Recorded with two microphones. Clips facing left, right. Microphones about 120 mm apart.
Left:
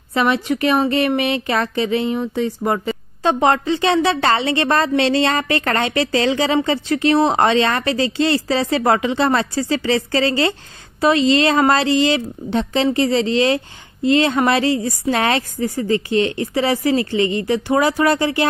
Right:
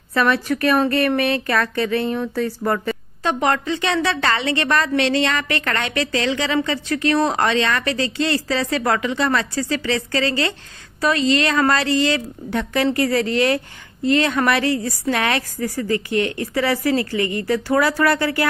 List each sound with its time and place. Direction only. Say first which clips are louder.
0.1 s a woman's voice: left 1 dB; 20° left (ahead or behind)
3.2 s a woman's voice: left 4 dB; 30° left (ahead or behind)